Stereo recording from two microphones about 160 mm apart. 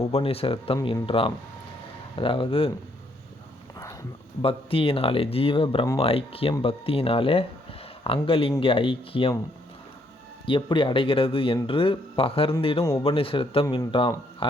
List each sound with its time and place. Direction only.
0.1 s speech: 35° left (ahead or behind)
4.4 s speech: 35° left (ahead or behind)
10.4 s speech: 30° left (ahead or behind)